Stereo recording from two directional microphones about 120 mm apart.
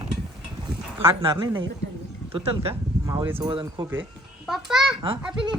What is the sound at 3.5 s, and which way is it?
Speech, 45° right (ahead or behind).